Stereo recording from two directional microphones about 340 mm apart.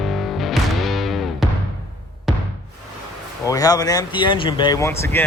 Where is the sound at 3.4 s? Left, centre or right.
Centre.